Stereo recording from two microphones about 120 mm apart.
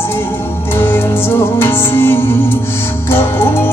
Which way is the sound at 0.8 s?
20° left (ahead or behind).